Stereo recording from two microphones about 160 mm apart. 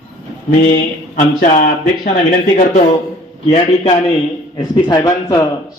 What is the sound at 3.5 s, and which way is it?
Speech, 40° left (ahead or behind).